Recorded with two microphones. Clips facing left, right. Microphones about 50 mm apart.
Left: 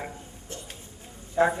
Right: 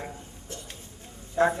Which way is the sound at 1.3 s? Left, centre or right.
Centre.